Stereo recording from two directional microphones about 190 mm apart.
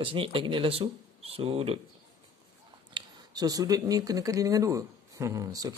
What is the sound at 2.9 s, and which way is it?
Speech, 20° right (ahead or behind).